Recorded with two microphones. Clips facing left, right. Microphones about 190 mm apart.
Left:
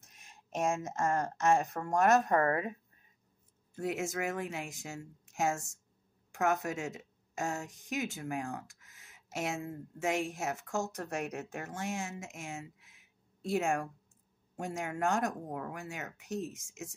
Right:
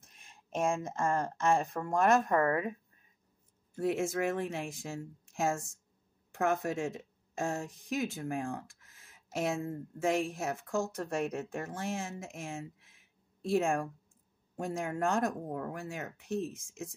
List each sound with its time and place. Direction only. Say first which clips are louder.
0.0 s speech: even; 30° right (ahead or behind)
2.2 s a woman's voice: even; 30° left (ahead or behind)
3.7 s speech: right 4 dB; 30° right (ahead or behind)